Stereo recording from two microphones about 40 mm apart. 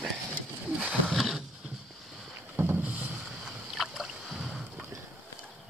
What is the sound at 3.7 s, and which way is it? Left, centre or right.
Boat, centre.